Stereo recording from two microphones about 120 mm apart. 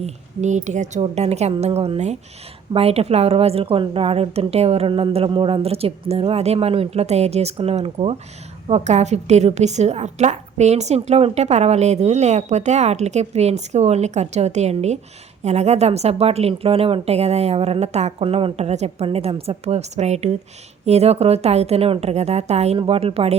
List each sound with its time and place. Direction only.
0.0 s speech: 80° right
1.0 s a woman's voice: 65° right (ahead or behind)
19.0 s a woman's voice: 55° right (ahead or behind)
22.8 s a woman's voice: 50° right (ahead or behind)